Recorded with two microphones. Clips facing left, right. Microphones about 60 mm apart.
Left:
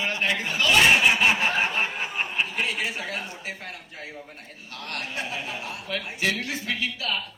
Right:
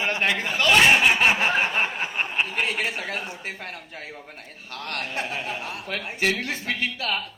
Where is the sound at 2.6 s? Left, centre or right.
Right.